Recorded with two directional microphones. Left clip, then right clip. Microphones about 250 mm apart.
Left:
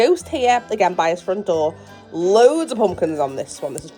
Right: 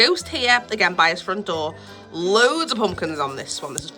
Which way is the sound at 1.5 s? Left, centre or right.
Right.